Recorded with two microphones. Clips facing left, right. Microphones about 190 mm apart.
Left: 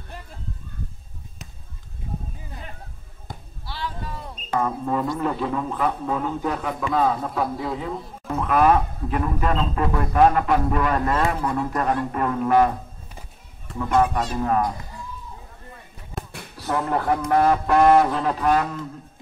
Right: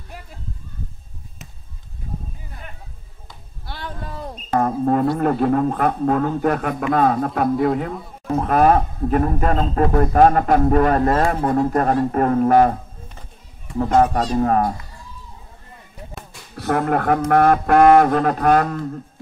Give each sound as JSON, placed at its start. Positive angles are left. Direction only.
{"t": 3.6, "sound": "speech", "side_deg": -50}
{"t": 6.9, "sound": "a sound", "side_deg": -60}
{"t": 8.4, "sound": "a man's voice", "side_deg": -40}
{"t": 13.7, "sound": "a man's voice", "side_deg": -50}
{"t": 16.5, "sound": "speech", "side_deg": -55}
{"t": 17.3, "sound": "a sound", "side_deg": -60}